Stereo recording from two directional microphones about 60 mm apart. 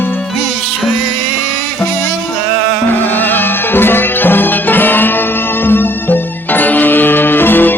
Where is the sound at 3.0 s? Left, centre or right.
Left.